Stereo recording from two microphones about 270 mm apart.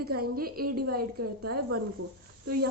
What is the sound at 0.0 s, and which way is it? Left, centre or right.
A woman's voice, right.